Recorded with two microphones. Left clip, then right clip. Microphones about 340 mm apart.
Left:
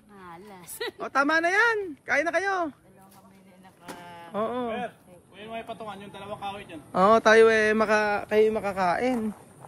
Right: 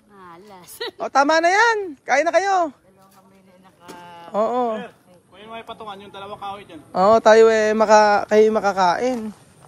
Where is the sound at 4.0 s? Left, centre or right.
Centre.